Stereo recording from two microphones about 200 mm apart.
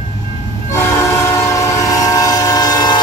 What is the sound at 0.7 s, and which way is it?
Train, 15° left (ahead or behind).